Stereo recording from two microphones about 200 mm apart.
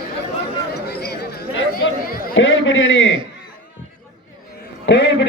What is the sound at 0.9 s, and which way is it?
Chatter, 50° left (ahead or behind).